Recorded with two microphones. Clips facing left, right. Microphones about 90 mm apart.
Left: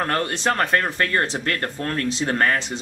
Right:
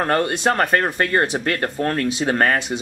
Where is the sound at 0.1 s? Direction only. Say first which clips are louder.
Right 4 dB; 10° right (ahead or behind).